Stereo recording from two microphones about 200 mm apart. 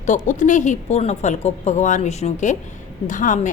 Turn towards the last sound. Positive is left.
turn(degrees=40)  # may be behind; listen again after turning